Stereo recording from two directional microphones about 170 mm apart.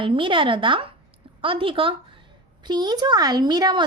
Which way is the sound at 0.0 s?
30° right (ahead or behind).